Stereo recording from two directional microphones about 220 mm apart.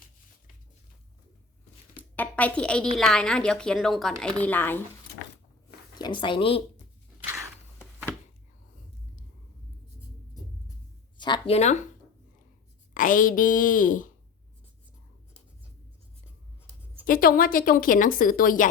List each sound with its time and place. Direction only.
2.0 s a sound: 5° left (ahead or behind)
3.0 s a woman's voice: 5° left (ahead or behind)
6.0 s speech: 20° left (ahead or behind)
11.2 s a sound: 25° left (ahead or behind)
12.9 s a woman's voice: 35° left (ahead or behind)
17.1 s a woman's voice: 40° left (ahead or behind)